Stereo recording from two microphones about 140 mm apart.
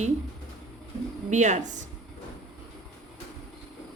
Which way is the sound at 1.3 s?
60° right (ahead or behind).